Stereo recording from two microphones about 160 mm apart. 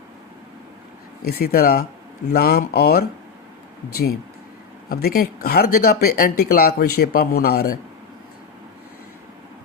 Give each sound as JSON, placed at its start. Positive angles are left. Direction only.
{"t": 1.2, "sound": "speech", "side_deg": 70}
{"t": 4.9, "sound": "speech", "side_deg": 70}